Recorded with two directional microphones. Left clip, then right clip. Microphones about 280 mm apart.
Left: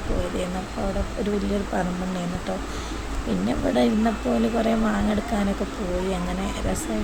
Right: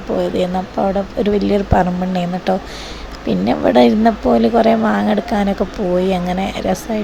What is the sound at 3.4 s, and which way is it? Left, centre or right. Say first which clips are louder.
Speech: right 11 dB; right.